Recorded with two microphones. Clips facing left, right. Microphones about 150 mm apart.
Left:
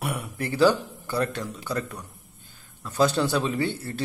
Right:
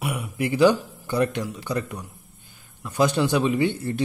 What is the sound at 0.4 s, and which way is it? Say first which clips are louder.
A man's voice: right 3 dB; 15° right (ahead or behind).